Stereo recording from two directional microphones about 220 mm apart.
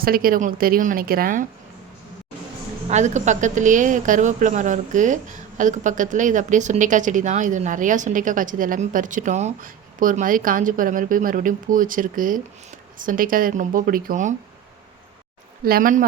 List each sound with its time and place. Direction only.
0.0 s a woman's voice: 40° right (ahead or behind)
2.9 s a woman's voice: 30° right (ahead or behind)
15.6 s a woman's voice: 40° right (ahead or behind)